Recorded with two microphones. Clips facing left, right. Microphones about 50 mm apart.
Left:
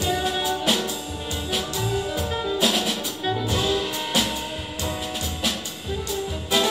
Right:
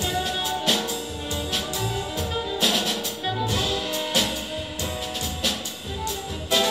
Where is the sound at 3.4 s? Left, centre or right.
Left.